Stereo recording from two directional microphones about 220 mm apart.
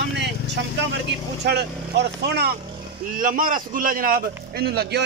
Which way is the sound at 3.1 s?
40° right (ahead or behind).